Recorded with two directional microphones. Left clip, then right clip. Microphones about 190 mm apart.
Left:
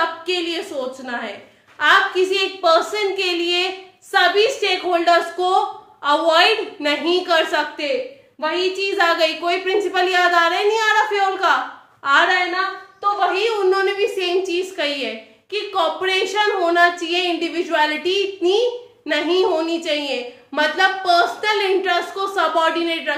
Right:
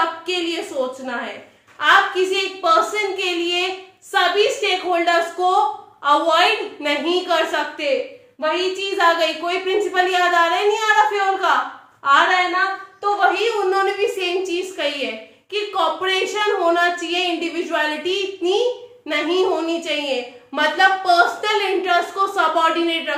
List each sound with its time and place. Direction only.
0.3 s a woman's voice: 10° left (ahead or behind)
1.8 s a woman's voice: 20° left (ahead or behind)